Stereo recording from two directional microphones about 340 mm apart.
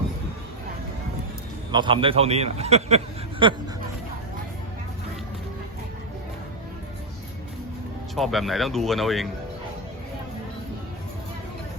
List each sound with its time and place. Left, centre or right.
1.7 s a man's voice: centre
8.1 s speech: centre